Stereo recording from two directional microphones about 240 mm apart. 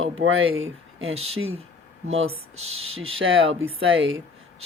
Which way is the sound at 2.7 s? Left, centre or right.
Right.